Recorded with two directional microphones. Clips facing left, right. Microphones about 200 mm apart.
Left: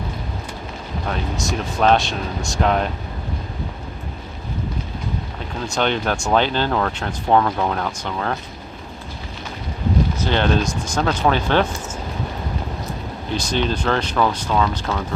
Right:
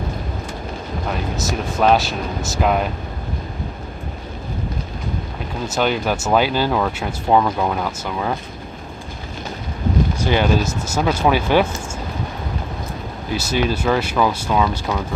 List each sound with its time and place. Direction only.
1.4 s speech: 5° right (ahead or behind)
5.6 s speech: 5° right (ahead or behind)
10.2 s speech: 10° right (ahead or behind)
13.3 s speech: 5° right (ahead or behind)